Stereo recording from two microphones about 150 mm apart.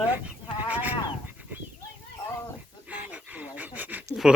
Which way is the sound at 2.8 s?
10° right (ahead or behind).